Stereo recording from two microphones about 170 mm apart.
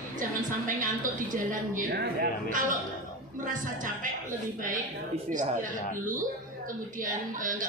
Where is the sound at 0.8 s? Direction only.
50° right (ahead or behind).